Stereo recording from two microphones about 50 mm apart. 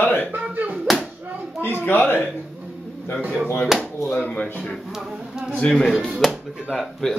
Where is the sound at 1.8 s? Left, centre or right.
Left.